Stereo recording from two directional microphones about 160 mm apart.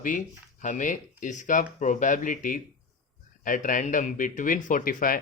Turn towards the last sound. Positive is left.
turn(degrees=60)  # may be behind; listen again after turning